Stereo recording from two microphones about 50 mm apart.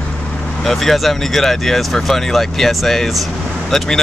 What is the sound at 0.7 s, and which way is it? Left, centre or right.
Speech, centre.